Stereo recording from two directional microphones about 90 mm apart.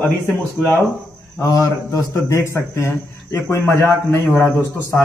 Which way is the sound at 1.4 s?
35° left (ahead or behind).